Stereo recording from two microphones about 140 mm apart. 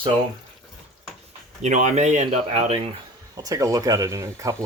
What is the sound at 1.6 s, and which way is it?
Speech, 60° right (ahead or behind).